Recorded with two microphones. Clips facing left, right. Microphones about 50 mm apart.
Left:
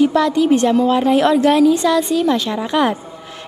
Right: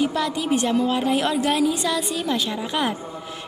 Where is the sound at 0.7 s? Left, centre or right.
Centre.